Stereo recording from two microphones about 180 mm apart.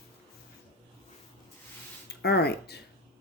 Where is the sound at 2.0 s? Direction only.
65° left (ahead or behind).